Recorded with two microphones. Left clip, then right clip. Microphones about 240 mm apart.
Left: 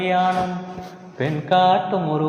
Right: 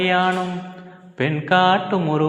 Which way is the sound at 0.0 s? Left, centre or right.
Right.